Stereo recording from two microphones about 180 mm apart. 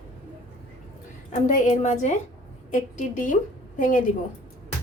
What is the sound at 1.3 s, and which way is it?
A woman's voice, 45° left (ahead or behind).